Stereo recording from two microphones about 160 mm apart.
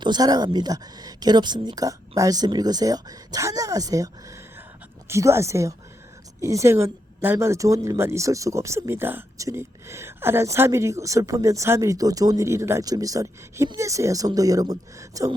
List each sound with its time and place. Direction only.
0.0 s a woman's voice: 25° right (ahead or behind)